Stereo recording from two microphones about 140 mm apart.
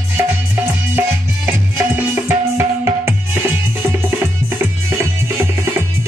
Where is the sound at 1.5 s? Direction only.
15° right (ahead or behind).